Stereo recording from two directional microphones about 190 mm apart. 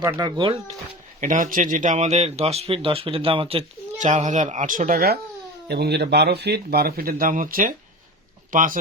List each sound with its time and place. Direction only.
0.0 s speech: 20° right (ahead or behind)
1.2 s speech: 45° right (ahead or behind)